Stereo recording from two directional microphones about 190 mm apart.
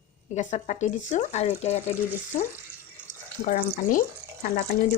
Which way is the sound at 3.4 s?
45° left (ahead or behind).